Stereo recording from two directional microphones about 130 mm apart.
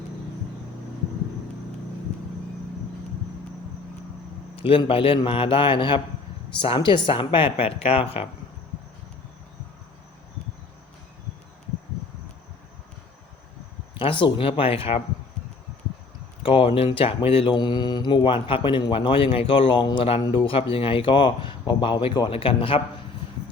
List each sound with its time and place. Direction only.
4.5 s a woman's voice: 45° left (ahead or behind)
14.0 s a woman's voice: 40° left (ahead or behind)
16.4 s a woman's voice: 45° left (ahead or behind)
17.5 s a woman's voice: 35° left (ahead or behind)
22.3 s a woman's voice: 45° left (ahead or behind)